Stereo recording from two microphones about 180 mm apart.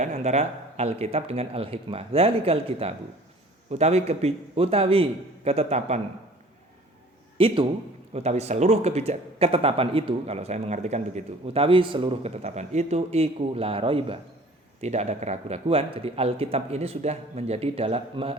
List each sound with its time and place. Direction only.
0.0 s speech: 40° right (ahead or behind)
7.3 s a man's voice: 30° right (ahead or behind)